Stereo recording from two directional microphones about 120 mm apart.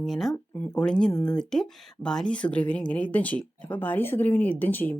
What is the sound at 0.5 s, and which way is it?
Speech, 15° left (ahead or behind).